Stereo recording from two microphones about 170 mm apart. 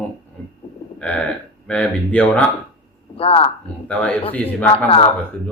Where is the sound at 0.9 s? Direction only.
5° left (ahead or behind).